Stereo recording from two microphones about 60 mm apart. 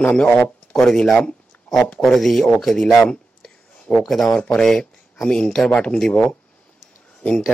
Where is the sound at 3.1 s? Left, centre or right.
Centre.